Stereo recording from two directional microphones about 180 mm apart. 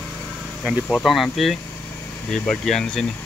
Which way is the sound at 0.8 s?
Centre (ahead or behind).